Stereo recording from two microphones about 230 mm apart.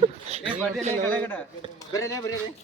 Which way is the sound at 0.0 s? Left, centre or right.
Right.